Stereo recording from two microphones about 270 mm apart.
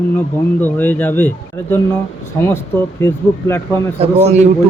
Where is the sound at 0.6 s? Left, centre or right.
Centre.